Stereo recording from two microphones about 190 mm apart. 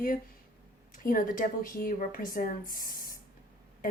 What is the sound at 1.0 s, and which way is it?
Speech, 45° left (ahead or behind).